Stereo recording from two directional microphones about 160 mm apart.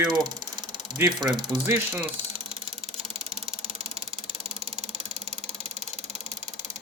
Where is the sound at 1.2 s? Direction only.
Centre (ahead or behind).